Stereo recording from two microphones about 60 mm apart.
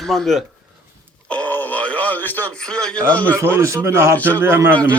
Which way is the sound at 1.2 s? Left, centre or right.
Left.